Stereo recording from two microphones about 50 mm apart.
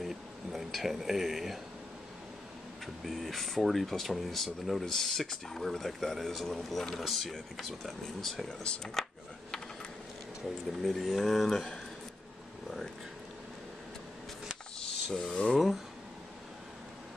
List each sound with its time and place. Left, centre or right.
0.0 s a sound: centre
0.7 s speech: centre
3.1 s speech: centre
8.6 s speech: centre
10.8 s speech: centre
15.0 s speech: centre
15.5 s speech: centre